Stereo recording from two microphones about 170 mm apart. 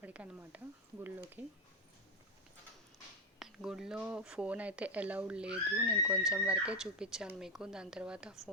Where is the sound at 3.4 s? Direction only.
5° right (ahead or behind).